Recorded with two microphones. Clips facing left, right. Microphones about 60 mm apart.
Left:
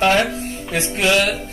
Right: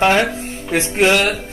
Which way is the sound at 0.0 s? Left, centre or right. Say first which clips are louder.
Right 2 dB; right.